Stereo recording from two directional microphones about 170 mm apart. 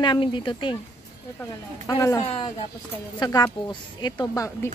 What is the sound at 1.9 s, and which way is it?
A woman's voice, 20° left (ahead or behind).